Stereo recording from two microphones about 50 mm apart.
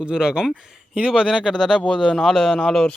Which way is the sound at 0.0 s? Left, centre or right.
Centre.